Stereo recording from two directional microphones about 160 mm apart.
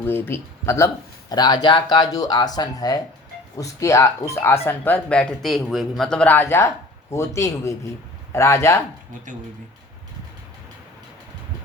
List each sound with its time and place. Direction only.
0.0 s speech: 15° left (ahead or behind)